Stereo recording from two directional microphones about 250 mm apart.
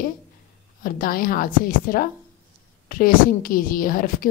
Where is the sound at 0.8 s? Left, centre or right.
Left.